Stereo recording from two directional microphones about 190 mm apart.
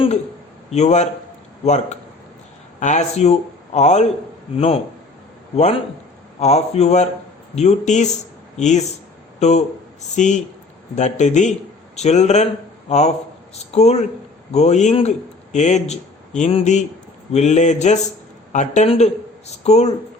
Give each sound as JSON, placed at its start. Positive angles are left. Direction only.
{"t": 0.7, "sound": "a man's voice", "side_deg": 35}